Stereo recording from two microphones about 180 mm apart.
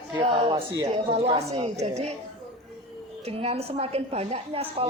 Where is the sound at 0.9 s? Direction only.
35° right (ahead or behind).